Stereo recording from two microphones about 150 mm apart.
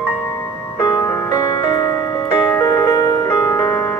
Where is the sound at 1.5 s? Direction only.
25° left (ahead or behind).